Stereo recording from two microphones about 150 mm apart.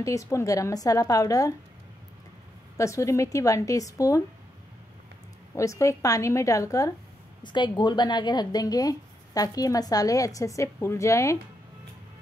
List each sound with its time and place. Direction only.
0.0 s speech: 20° left (ahead or behind)
2.8 s speech: 20° left (ahead or behind)
5.5 s speech: 20° left (ahead or behind)